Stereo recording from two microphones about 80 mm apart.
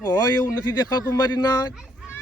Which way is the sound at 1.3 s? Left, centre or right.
Left.